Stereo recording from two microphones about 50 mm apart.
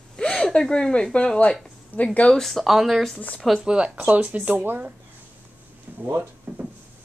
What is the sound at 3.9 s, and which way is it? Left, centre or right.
Speech, right.